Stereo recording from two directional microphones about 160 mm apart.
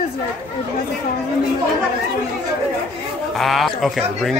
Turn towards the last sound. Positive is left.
turn(degrees=0)  # may be behind; listen again after turning